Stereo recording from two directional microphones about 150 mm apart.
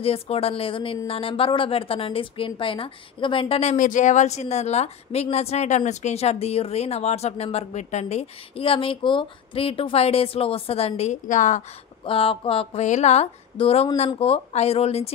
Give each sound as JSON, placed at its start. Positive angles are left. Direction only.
{"t": 0.0, "sound": "a woman's voice", "side_deg": 40}
{"t": 3.7, "sound": "a woman's voice", "side_deg": 60}
{"t": 12.0, "sound": "a woman's voice", "side_deg": 40}